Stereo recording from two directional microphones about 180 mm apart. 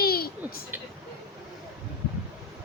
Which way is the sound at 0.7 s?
10° right (ahead or behind).